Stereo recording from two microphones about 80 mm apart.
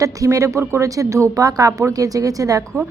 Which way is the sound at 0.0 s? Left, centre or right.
Right.